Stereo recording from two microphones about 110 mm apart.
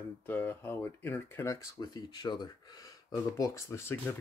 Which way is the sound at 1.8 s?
40° left (ahead or behind).